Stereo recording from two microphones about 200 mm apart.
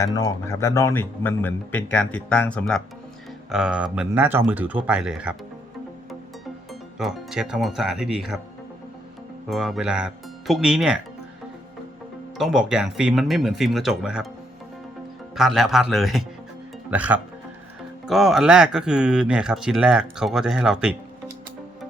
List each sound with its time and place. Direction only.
0.0 s speech: 20° left (ahead or behind); by 5.3 s 5° right (ahead or behind)
7.0 s speech: centre (ahead or behind)
9.5 s speech: centre (ahead or behind)
12.4 s speech: centre (ahead or behind)
15.4 s speech: centre (ahead or behind)